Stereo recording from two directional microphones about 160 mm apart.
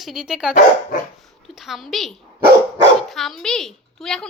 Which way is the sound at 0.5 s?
55° left (ahead or behind).